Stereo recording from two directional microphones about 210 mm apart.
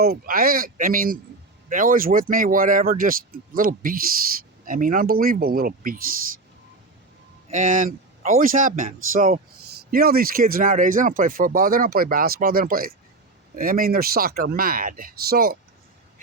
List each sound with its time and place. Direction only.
0.0 s speech: 45° right (ahead or behind)
7.5 s speech: 35° right (ahead or behind)